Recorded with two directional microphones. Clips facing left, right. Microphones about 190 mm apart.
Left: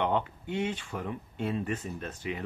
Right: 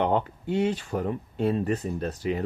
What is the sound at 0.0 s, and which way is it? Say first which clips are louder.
Speech: right 4 dB; 35° right (ahead or behind).